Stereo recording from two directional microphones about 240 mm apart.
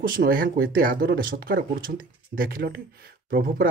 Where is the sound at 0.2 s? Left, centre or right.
Right.